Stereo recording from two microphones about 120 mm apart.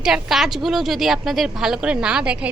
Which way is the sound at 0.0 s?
5° right (ahead or behind).